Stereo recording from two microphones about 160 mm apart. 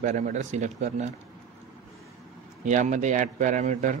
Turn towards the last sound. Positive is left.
turn(degrees=-50)  # may be behind; listen again after turning